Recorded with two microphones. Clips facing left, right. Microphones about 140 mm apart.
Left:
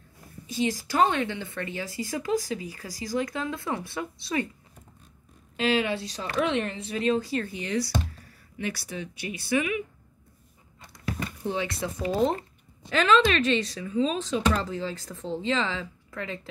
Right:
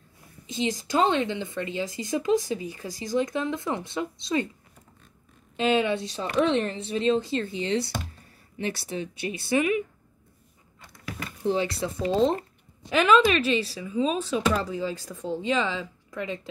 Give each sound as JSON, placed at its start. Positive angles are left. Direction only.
{"t": 0.5, "sound": "speech", "side_deg": -20}
{"t": 5.6, "sound": "speech", "side_deg": -25}
{"t": 11.4, "sound": "speech", "side_deg": -30}
{"t": 12.9, "sound": "speech", "side_deg": -10}